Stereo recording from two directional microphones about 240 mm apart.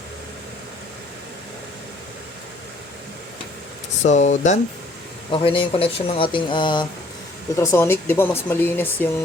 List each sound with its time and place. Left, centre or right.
4.0 s speech: left; by 9.0 s centre